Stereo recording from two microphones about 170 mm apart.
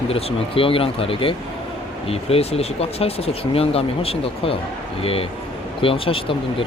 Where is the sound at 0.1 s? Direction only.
35° left (ahead or behind).